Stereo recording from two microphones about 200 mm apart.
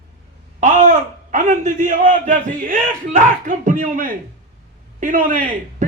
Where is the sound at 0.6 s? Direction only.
40° right (ahead or behind).